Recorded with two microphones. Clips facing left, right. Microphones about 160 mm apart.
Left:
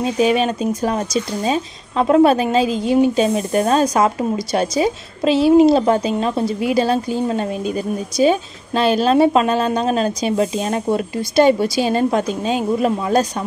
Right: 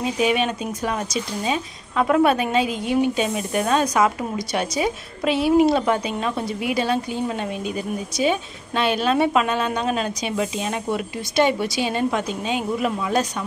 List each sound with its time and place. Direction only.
0.2 s speech: 35° left (ahead or behind)